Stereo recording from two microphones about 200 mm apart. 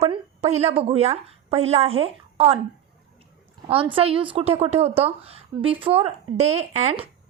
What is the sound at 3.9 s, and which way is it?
A woman's voice, 25° right (ahead or behind).